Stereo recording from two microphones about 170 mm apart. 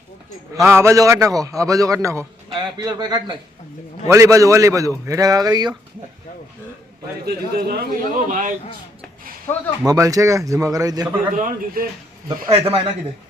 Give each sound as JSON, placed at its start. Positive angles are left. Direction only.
{"t": 0.5, "sound": "a man's voice", "side_deg": -15}
{"t": 7.3, "sound": "a man's voice", "side_deg": -65}
{"t": 9.5, "sound": "speech", "side_deg": 15}
{"t": 9.8, "sound": "a man's voice", "side_deg": -20}
{"t": 11.3, "sound": "a man's voice", "side_deg": -55}
{"t": 12.5, "sound": "speech", "side_deg": -35}